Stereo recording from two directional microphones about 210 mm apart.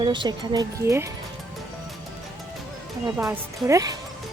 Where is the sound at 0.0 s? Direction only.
20° right (ahead or behind).